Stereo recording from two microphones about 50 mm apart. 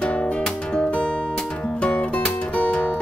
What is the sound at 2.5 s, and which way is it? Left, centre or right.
Music, left.